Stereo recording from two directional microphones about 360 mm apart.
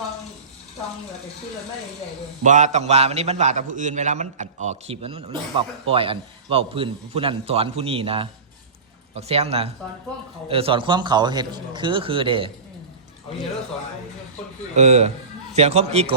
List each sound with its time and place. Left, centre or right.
2.4 s a man's voice: centre
14.8 s a man's voice: centre